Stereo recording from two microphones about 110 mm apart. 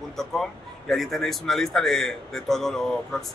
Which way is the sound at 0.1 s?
5° left (ahead or behind).